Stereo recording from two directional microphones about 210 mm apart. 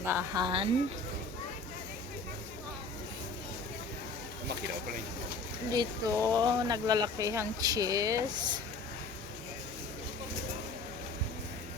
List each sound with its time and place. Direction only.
0.0 s speech: 10° right (ahead or behind)
5.7 s speech: 15° right (ahead or behind)